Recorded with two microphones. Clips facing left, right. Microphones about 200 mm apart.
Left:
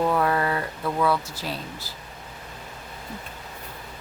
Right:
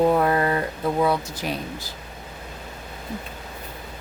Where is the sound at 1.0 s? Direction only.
20° right (ahead or behind).